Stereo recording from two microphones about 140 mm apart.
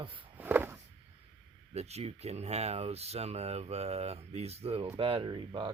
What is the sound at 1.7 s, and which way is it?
Speech, 50° right (ahead or behind).